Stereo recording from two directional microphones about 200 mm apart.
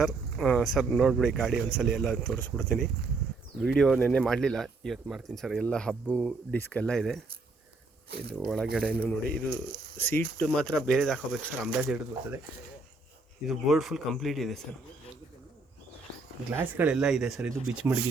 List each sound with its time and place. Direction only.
0.0 s speech: centre (ahead or behind)
8.1 s speech: 55° right (ahead or behind)
8.4 s speech: centre (ahead or behind)
13.5 s speech: centre (ahead or behind)
16.7 s speech: 5° right (ahead or behind)